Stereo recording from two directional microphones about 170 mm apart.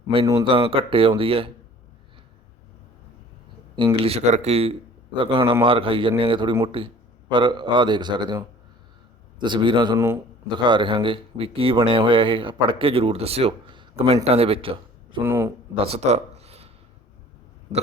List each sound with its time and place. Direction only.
0.1 s speech: 30° right (ahead or behind)
4.0 s speech: 40° right (ahead or behind)
15.2 s speech: 15° right (ahead or behind)
15.8 s speech: 40° right (ahead or behind)